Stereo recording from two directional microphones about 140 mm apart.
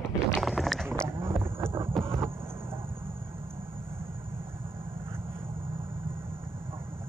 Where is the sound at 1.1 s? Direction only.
15° right (ahead or behind).